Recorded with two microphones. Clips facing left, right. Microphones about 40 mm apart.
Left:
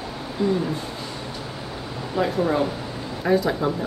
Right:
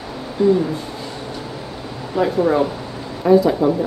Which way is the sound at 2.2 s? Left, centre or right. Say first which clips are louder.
Right 5 dB; centre.